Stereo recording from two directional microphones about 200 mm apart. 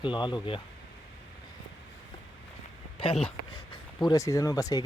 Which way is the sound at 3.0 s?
30° left (ahead or behind).